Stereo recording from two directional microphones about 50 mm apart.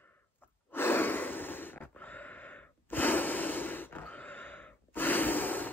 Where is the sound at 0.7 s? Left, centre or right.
Left.